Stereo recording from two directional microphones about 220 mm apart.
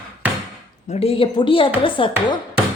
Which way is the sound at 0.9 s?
25° left (ahead or behind).